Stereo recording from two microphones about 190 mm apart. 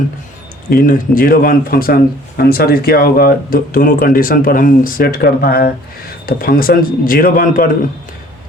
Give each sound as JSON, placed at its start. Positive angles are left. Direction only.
{"t": 0.7, "sound": "speech", "side_deg": 45}